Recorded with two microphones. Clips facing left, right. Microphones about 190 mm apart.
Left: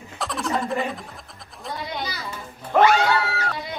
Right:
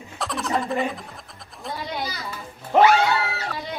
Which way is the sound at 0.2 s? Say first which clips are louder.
Even; centre (ahead or behind).